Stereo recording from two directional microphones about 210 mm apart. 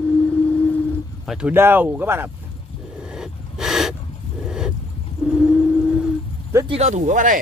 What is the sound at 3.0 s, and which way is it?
Gasp, 5° right (ahead or behind).